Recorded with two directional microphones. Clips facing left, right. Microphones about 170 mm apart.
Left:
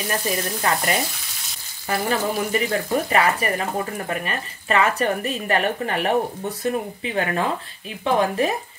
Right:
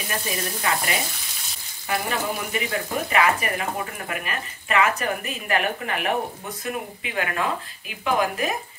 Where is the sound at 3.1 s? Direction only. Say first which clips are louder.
Right 1 dB; 35° left (ahead or behind).